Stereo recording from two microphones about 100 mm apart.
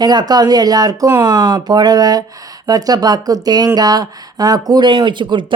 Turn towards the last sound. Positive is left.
turn(degrees=-50)  # may be behind; listen again after turning